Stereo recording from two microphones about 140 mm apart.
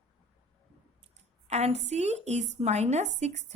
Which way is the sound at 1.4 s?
50° right (ahead or behind).